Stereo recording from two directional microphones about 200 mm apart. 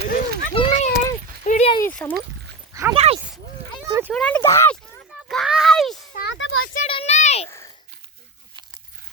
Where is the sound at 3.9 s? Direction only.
10° right (ahead or behind).